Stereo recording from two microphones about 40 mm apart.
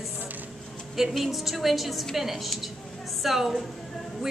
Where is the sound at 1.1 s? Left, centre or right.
Centre.